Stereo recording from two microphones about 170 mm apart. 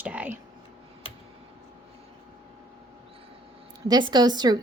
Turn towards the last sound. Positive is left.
turn(degrees=-25)  # may be behind; listen again after turning